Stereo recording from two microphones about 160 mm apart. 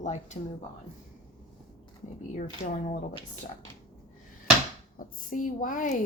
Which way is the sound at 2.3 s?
50° left (ahead or behind).